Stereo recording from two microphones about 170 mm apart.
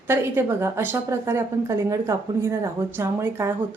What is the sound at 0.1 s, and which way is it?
A woman's voice, 15° right (ahead or behind).